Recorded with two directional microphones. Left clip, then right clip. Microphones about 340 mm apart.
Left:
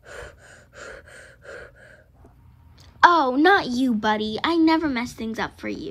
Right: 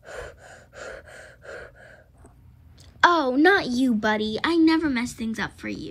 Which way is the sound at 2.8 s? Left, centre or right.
Centre.